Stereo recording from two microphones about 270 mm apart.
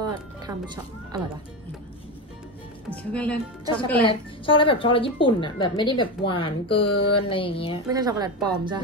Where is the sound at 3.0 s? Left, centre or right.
Centre.